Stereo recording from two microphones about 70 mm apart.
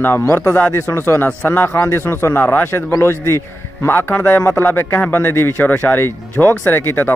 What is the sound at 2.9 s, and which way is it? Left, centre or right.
A man's voice, left.